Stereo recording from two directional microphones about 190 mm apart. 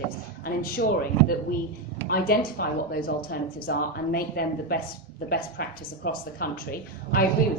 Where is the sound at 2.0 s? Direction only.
50° left (ahead or behind).